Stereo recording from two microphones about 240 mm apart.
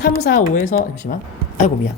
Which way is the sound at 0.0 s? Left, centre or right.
Left.